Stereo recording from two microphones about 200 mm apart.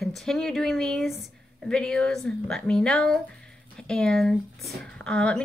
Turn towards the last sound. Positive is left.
turn(degrees=5)  # may be behind; listen again after turning